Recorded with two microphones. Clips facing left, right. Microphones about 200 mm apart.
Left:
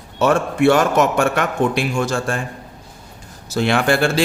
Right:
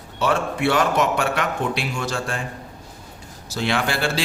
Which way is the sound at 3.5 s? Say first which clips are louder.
Left 6 dB; 55° left (ahead or behind).